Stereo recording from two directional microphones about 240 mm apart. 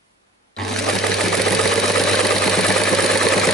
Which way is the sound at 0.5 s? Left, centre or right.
Centre.